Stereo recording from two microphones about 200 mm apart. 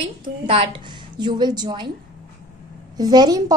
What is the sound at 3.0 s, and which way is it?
Speech, 20° right (ahead or behind).